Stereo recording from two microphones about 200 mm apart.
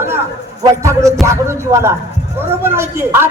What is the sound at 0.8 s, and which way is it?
Speech, 15° right (ahead or behind).